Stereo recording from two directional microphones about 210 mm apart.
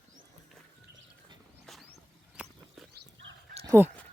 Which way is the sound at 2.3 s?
5° right (ahead or behind).